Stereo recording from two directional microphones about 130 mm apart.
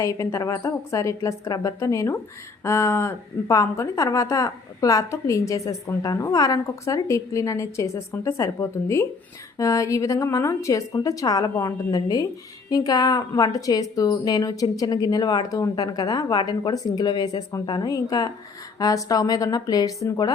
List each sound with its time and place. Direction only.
0.0 s a woman's voice: 25° left (ahead or behind)